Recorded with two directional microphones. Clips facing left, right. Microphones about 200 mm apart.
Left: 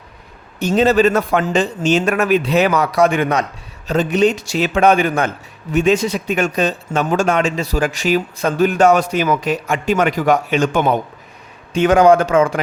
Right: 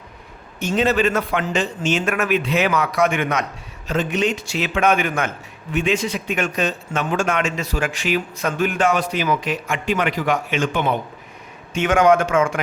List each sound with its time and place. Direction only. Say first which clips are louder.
0.6 s a man's voice: left 5 dB; 35° left (ahead or behind)